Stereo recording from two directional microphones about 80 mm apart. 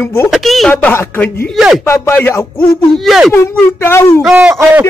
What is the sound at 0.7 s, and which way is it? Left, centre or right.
Speech, left.